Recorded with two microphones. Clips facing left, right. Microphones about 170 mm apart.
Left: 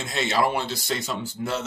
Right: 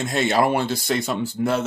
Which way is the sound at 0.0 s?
50° right (ahead or behind).